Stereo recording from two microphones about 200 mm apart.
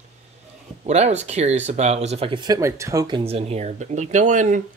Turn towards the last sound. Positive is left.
turn(degrees=-40)  # may be behind; listen again after turning